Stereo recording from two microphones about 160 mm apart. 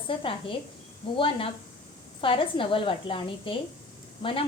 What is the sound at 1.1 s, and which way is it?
A woman's voice, 35° left (ahead or behind).